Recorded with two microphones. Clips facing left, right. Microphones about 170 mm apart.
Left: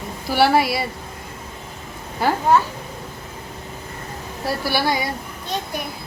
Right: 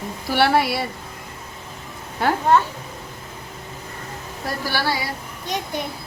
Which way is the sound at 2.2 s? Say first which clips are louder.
Left 1 dB; centre (ahead or behind).